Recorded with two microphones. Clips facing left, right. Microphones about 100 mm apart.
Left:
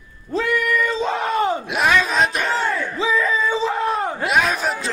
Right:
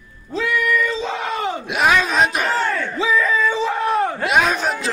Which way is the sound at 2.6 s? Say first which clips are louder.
Right 1 dB; 10° left (ahead or behind).